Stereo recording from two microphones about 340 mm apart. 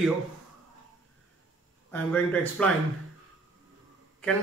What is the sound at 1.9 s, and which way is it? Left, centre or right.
Speech, centre.